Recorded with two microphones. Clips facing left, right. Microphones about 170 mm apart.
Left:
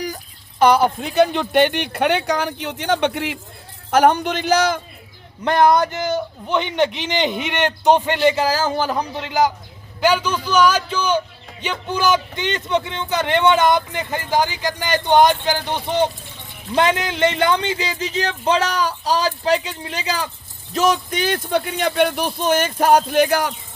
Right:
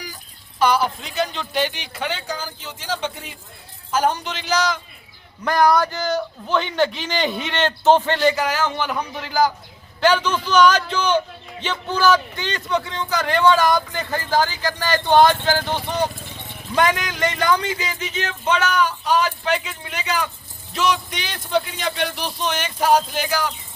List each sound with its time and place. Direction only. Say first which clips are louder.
0.6 s speech: left 5 dB; 55° left (ahead or behind)
5.5 s a man's voice: left 2 dB; 25° left (ahead or behind)
8.4 s speech: left 3 dB; 35° left (ahead or behind)
10.0 s a man's voice: even; 10° left (ahead or behind); by 20.3 s 30° left (ahead or behind)
20.7 s speech: left 4 dB; 45° left (ahead or behind)